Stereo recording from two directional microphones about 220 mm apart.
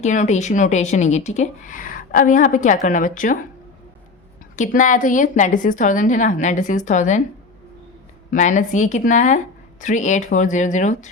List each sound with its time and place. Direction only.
0.0 s a woman's voice: 35° left (ahead or behind)
4.5 s a woman's voice: 35° left (ahead or behind)
8.3 s a woman's voice: 35° left (ahead or behind)